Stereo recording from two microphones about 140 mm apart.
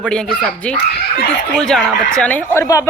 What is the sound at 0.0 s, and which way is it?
Speech, 5° left (ahead or behind).